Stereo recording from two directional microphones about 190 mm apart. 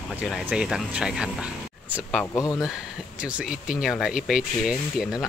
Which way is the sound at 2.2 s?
15° left (ahead or behind).